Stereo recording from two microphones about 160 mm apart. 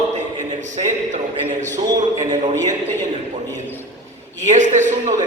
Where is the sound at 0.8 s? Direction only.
45° right (ahead or behind).